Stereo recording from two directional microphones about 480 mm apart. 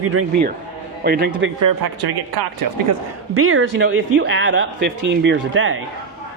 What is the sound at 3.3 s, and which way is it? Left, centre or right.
Speech, right.